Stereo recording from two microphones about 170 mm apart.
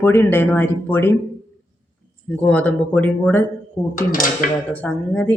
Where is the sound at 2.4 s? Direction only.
10° left (ahead or behind).